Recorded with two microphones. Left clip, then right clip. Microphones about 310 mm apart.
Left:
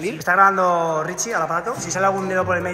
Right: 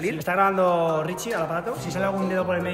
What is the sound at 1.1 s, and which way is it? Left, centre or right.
Speech, centre.